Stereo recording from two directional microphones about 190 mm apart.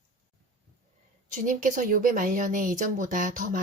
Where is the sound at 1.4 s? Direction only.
45° right (ahead or behind).